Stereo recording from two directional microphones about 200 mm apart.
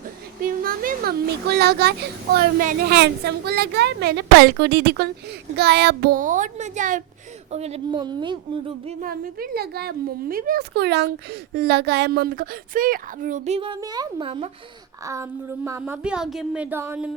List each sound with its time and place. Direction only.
0.4 s speech: 45° right (ahead or behind); by 9.0 s 30° right (ahead or behind)
9.0 s speech: 45° right (ahead or behind); by 14.5 s 25° right (ahead or behind)
15.0 s speech: 15° right (ahead or behind)